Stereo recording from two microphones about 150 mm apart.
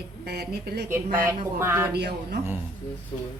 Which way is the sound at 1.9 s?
90° right.